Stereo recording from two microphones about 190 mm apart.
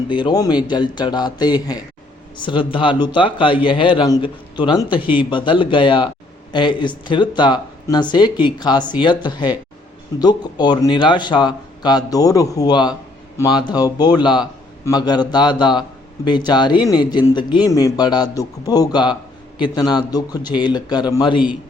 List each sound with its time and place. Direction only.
0.1 s a man's voice: 20° left (ahead or behind)